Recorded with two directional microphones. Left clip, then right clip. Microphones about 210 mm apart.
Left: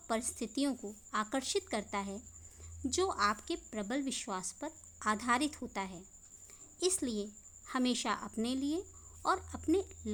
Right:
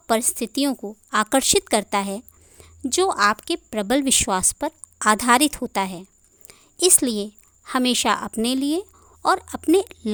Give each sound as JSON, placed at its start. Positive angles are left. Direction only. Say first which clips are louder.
{"t": 0.1, "sound": "a woman's voice", "louder": "right 15 dB", "side_deg": -45}